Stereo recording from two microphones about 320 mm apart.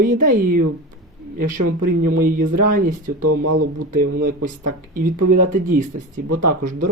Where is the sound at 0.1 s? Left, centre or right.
Right.